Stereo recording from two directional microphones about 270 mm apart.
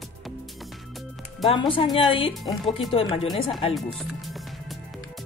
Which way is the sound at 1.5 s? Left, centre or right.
Centre.